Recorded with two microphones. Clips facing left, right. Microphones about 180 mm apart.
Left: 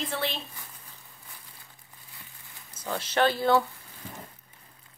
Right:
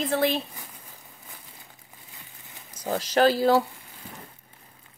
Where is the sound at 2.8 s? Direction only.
40° right (ahead or behind).